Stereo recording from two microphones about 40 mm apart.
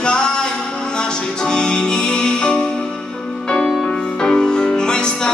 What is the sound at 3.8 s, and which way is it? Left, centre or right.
Music, centre.